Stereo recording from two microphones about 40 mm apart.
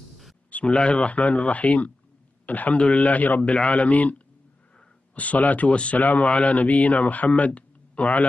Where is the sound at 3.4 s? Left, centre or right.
Left.